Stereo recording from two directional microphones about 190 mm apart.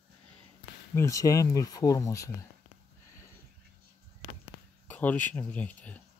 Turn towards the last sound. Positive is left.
turn(degrees=10)  # may be behind; listen again after turning